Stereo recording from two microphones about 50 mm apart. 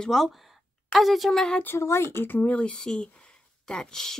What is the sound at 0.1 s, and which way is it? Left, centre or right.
A woman's voice, centre.